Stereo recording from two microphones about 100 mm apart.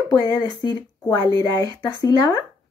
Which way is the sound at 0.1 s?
40° left (ahead or behind).